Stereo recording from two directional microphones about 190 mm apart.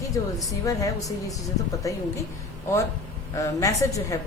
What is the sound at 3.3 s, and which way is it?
Speech, 15° left (ahead or behind).